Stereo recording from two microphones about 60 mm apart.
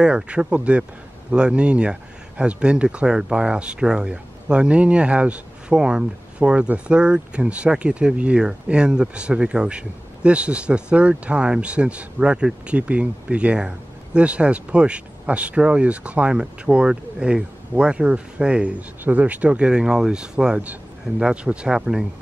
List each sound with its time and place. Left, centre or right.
0.0 s speech: centre